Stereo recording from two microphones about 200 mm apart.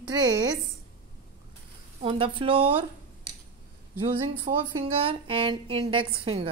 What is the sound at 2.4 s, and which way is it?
Speech, 30° right (ahead or behind).